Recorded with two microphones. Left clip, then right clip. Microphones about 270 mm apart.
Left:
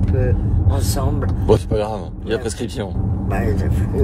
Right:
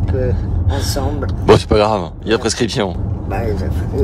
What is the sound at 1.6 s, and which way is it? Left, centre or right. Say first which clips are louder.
Speech: right 8 dB; right.